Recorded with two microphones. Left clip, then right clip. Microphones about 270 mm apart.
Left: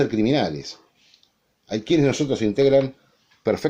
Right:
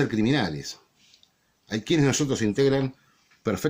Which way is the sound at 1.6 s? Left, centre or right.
Right.